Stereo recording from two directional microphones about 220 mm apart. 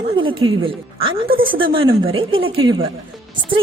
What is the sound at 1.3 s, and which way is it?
Speech, 40° right (ahead or behind).